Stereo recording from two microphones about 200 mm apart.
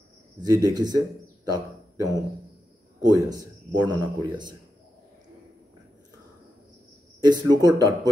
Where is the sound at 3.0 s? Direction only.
20° right (ahead or behind).